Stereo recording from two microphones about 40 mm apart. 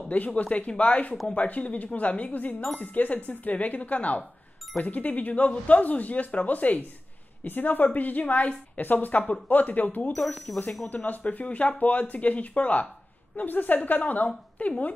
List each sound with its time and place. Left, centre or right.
0.1 s speech: left
7.4 s a woman's voice: left
10.1 s speech: centre
11.1 s a woman's voice: left